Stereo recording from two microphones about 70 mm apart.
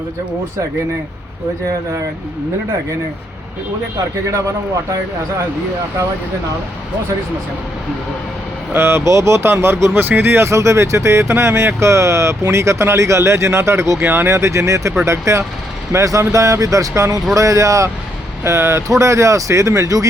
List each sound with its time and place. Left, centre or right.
8.7 s speech: right
14.0 s speech: right
18.4 s speech: right